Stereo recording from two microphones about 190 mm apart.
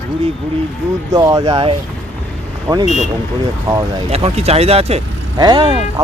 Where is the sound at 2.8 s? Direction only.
35° left (ahead or behind).